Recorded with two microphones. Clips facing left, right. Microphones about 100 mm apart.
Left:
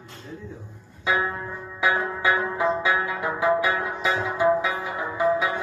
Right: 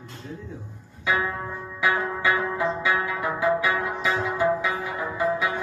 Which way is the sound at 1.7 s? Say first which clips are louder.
Left 1 dB; 25° left (ahead or behind).